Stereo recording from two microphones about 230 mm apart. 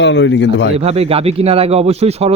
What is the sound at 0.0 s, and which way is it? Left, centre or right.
Speech, left.